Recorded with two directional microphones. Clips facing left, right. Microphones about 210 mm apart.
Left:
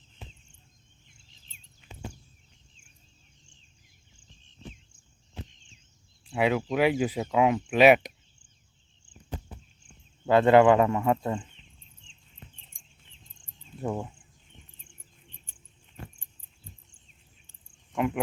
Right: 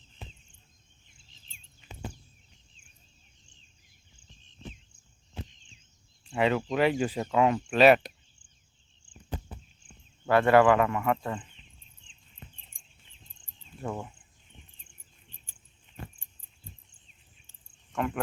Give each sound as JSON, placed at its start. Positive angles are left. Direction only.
{"t": 6.2, "sound": "speech", "side_deg": 10}
{"t": 10.2, "sound": "speech", "side_deg": 20}
{"t": 17.9, "sound": "cricket", "side_deg": 10}